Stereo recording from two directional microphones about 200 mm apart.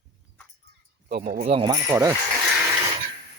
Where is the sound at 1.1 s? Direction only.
50° right (ahead or behind).